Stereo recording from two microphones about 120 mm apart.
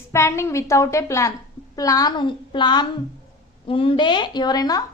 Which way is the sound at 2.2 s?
40° left (ahead or behind).